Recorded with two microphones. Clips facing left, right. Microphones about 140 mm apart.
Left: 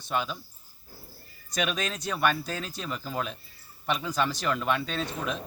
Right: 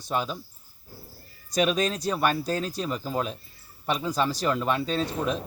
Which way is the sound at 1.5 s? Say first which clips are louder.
Right 6 dB; 35° right (ahead or behind).